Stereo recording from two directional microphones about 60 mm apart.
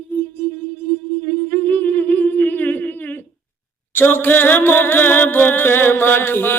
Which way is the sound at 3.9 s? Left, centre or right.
Left.